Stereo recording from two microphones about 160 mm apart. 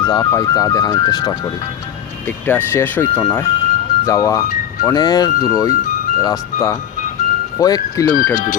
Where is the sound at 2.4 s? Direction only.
10° left (ahead or behind).